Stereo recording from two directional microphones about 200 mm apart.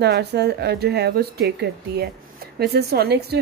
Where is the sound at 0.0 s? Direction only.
55° right (ahead or behind).